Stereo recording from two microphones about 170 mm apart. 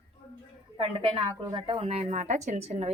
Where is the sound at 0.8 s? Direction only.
30° right (ahead or behind).